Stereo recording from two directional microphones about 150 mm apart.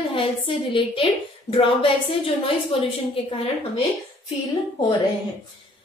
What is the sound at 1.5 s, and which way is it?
Speech, 35° left (ahead or behind).